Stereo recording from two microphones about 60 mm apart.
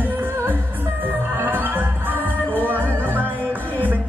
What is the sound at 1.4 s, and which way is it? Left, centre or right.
Music, right.